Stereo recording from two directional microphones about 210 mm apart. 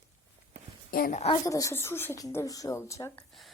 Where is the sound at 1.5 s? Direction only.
15° left (ahead or behind).